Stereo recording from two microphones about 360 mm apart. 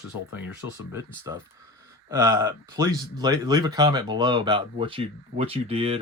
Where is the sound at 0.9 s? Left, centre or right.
Centre.